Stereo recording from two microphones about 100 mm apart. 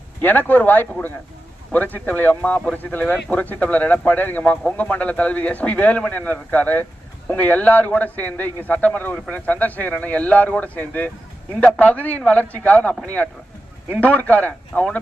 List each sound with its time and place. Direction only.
0.2 s speech: 15° left (ahead or behind)
14.0 s speech: 15° left (ahead or behind)